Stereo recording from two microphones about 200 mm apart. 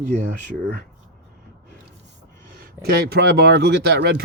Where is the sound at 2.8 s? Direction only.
55° right (ahead or behind).